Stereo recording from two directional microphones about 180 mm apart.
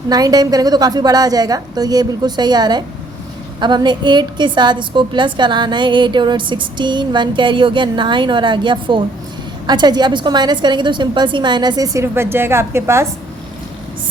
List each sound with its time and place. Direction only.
0.1 s a woman's voice: 20° right (ahead or behind)